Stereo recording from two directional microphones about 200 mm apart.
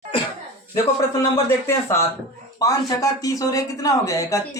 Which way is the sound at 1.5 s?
15° left (ahead or behind).